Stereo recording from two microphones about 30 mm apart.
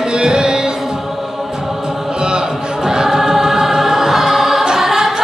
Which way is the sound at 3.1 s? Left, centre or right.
Centre.